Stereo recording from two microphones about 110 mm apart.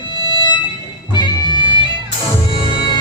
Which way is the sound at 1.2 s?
45° left (ahead or behind).